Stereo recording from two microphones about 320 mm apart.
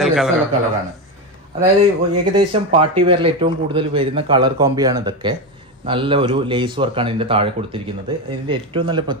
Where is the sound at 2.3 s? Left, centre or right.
Centre.